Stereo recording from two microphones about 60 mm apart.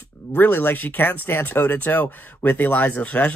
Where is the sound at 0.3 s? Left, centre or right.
Left.